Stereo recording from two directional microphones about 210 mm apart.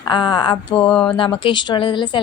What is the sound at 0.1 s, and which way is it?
Speech, 20° left (ahead or behind).